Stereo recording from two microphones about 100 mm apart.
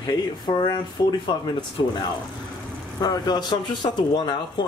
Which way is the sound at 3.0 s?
45° left (ahead or behind).